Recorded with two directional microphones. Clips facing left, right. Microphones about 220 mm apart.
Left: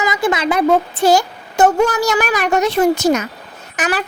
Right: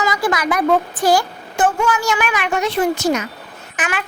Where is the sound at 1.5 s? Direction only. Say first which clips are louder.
Left 4 dB; 40° left (ahead or behind).